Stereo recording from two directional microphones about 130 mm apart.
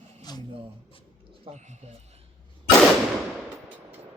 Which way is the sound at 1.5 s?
65° right (ahead or behind).